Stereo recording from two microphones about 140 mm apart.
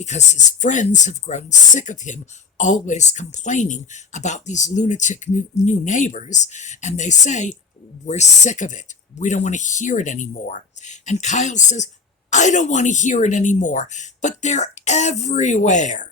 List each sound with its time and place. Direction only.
0.0 s speech: 55° left (ahead or behind)